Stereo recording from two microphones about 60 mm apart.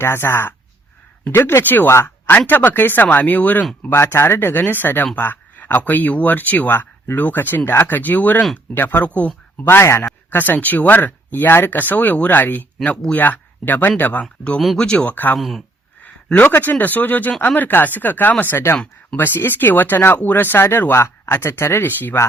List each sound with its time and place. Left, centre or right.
0.0 s speech: left
1.6 s speech: left
3.8 s speech: left
6.7 s speech: left
9.0 s speech: left
9.6 s speech: left
10.2 s speech: left; by 15.1 s centre
15.1 s speech: left
15.4 s speech: centre
16.0 s speech: left